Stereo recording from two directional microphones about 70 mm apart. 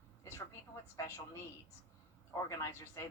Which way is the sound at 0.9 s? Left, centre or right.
Left.